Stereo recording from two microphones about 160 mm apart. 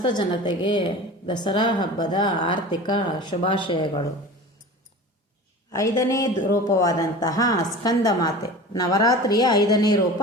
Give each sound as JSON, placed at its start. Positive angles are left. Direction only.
{"t": 0.0, "sound": "a woman's voice", "side_deg": 30}
{"t": 5.7, "sound": "a woman's voice", "side_deg": 20}